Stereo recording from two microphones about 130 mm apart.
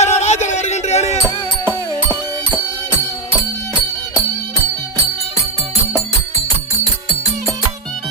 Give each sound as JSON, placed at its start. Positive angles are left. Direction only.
{"t": 0.0, "sound": "music", "side_deg": 60}